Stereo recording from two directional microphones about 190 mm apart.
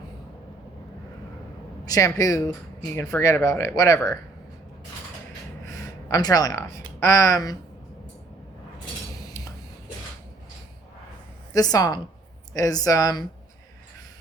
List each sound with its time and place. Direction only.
1.8 s speech: 20° left (ahead or behind)
5.6 s speech: 15° left (ahead or behind)
9.2 s cutlery: 20° left (ahead or behind)
11.5 s speech: 20° left (ahead or behind)